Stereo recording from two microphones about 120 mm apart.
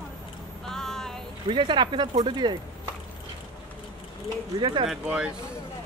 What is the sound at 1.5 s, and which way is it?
Speech, 40° right (ahead or behind).